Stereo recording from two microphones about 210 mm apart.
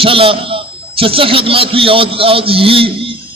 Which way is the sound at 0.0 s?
25° right (ahead or behind).